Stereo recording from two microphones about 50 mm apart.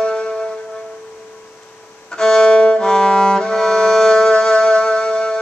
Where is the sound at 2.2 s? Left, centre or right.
Centre.